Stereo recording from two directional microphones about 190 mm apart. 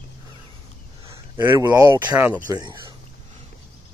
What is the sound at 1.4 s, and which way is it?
Speech, 10° right (ahead or behind).